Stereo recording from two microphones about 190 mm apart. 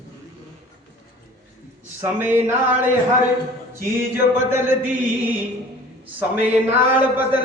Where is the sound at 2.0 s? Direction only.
10° right (ahead or behind).